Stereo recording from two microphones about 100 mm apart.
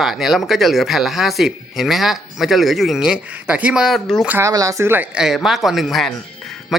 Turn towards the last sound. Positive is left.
turn(degrees=0)  # may be behind; listen again after turning